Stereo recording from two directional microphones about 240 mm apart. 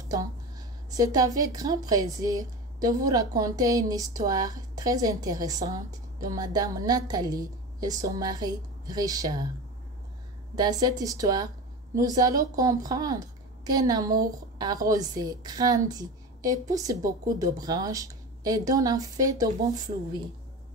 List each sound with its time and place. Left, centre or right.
0.8 s a woman's voice: centre
10.5 s a woman's voice: centre